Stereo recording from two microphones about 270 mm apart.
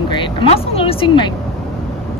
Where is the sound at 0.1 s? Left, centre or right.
Centre.